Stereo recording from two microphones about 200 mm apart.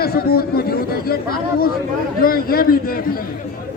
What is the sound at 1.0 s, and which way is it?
A man's voice, 50° left (ahead or behind).